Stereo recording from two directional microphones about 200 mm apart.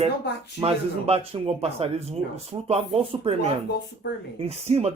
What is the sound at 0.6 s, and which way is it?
Speech, 30° right (ahead or behind).